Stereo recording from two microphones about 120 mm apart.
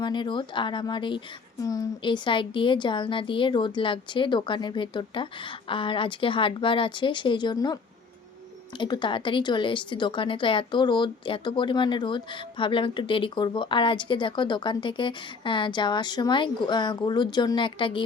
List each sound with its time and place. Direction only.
0.0 s a woman's voice: 40° left (ahead or behind)
1.6 s a woman's voice: 30° left (ahead or behind)
2.0 s a woman's voice: 40° left (ahead or behind)
8.8 s a woman's voice: 40° left (ahead or behind)